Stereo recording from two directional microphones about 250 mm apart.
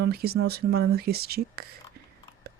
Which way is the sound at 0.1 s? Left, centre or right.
Right.